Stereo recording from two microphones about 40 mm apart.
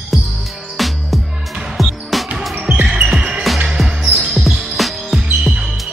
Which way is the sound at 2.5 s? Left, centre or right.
Right.